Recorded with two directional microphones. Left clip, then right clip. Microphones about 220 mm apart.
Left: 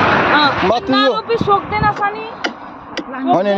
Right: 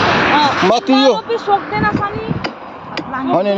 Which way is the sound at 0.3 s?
50° right (ahead or behind).